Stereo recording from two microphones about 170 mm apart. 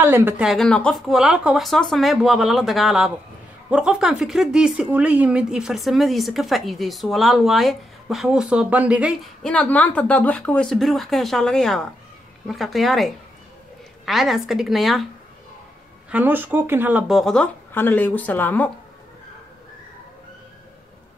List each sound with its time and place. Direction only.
0.0 s speech: 15° right (ahead or behind)
0.5 s speech: 5° left (ahead or behind)
16.1 s speech: 10° right (ahead or behind)
17.2 s speech: 5° left (ahead or behind)